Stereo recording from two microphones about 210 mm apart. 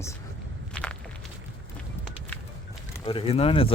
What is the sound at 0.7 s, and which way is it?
Walk, 5° left (ahead or behind).